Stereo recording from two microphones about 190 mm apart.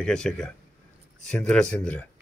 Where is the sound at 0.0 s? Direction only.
5° left (ahead or behind).